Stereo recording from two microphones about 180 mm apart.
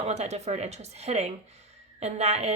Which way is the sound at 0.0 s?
35° right (ahead or behind).